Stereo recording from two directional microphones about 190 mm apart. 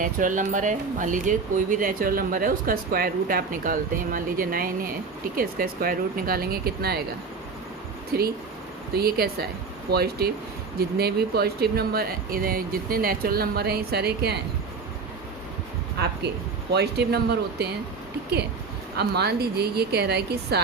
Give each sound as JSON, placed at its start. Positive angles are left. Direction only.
{"t": 0.0, "sound": "speech", "side_deg": -45}
{"t": 9.0, "sound": "speech", "side_deg": -55}
{"t": 16.7, "sound": "speech", "side_deg": -60}
{"t": 18.9, "sound": "speech", "side_deg": -60}